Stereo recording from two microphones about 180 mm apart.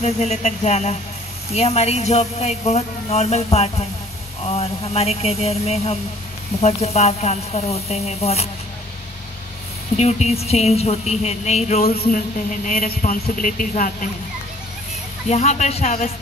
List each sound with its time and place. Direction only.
0.0 s speech: 40° left (ahead or behind)
9.9 s speech: 35° left (ahead or behind)
11.8 s a woman's voice: 60° left (ahead or behind)
15.2 s speech: 40° left (ahead or behind)